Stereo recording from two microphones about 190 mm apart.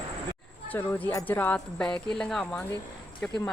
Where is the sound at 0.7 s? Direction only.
10° left (ahead or behind).